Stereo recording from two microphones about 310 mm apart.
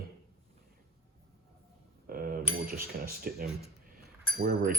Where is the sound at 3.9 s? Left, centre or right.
Right.